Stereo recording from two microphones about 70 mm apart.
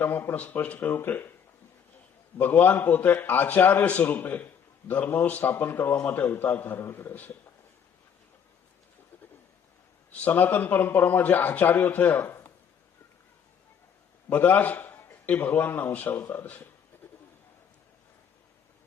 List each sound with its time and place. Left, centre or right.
0.0 s a man's voice: left
2.4 s a man's voice: left
10.1 s a man's voice: left
14.3 s a man's voice: left